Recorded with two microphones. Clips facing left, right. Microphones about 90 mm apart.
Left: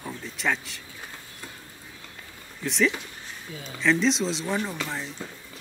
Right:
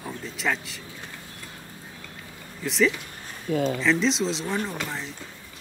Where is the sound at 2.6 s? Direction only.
Centre (ahead or behind).